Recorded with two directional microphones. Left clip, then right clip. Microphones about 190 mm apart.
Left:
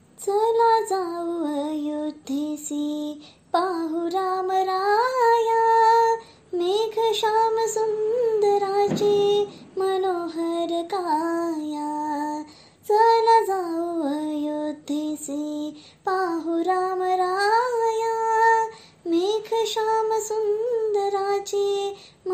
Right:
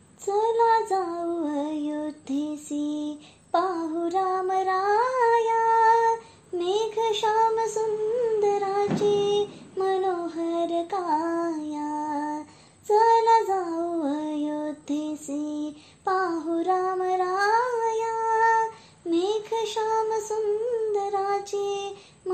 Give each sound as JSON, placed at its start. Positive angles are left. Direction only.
{"t": 0.2, "sound": "child singing", "side_deg": 30}
{"t": 20.9, "sound": "female singing", "side_deg": 30}